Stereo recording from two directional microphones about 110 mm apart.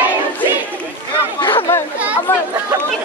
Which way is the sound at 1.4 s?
50° left (ahead or behind).